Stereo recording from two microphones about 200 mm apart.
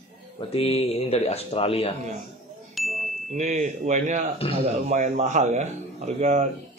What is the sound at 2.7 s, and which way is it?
Chime, centre (ahead or behind).